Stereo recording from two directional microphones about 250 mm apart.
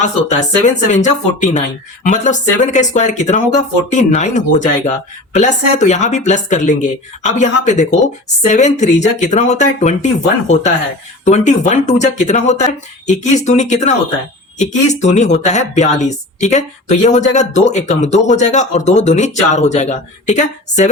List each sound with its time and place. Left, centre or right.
0.0 s a woman's voice: left
11.3 s a woman's voice: left